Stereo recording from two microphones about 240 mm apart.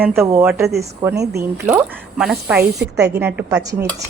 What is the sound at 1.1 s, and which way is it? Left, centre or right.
Speech, right.